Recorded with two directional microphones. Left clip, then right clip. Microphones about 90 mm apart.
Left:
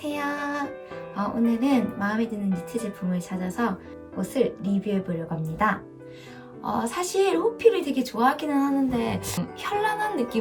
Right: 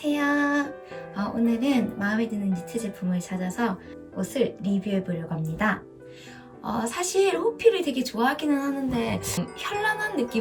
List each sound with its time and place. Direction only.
0.0 s music: 20° left (ahead or behind)
1.1 s speech: 20° left (ahead or behind)